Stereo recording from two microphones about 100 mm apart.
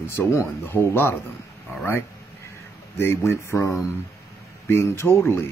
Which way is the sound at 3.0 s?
25° left (ahead or behind).